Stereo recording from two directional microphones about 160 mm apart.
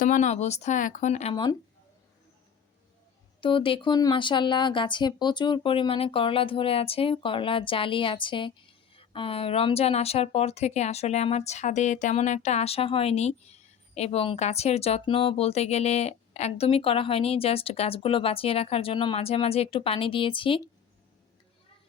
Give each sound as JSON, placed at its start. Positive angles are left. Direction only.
{"t": 0.0, "sound": "speech", "side_deg": 50}
{"t": 3.4, "sound": "speech", "side_deg": 35}